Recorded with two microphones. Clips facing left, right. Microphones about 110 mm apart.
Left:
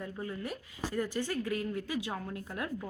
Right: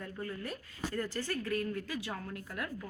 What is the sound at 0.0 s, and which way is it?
A woman's voice, 15° left (ahead or behind).